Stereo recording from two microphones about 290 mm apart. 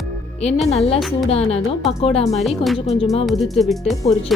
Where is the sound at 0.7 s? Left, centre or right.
Left.